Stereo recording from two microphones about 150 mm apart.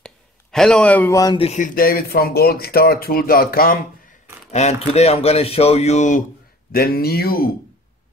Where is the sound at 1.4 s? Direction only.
50° left (ahead or behind); by 3.8 s 80° left.